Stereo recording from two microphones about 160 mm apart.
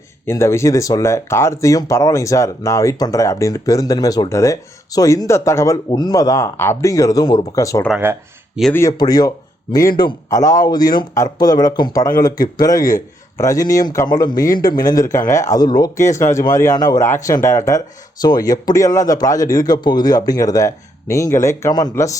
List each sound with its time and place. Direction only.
0.3 s speech: 15° left (ahead or behind)
7.9 s speech: 10° right (ahead or behind)
8.7 s speech: 20° left (ahead or behind)